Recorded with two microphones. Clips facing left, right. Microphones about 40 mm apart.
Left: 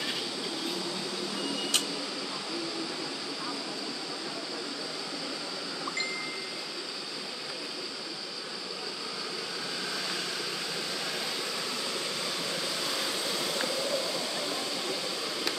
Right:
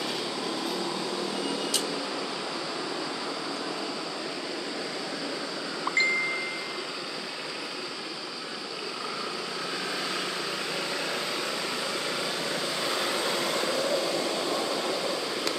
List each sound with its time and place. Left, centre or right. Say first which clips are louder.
6.0 s chime: right 11 dB; right
12.8 s vehicle: right 4 dB; right